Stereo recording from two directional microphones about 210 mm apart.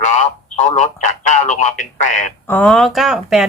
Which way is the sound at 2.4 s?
5° left (ahead or behind).